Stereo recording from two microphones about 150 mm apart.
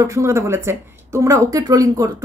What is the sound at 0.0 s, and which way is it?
Speech, 20° right (ahead or behind).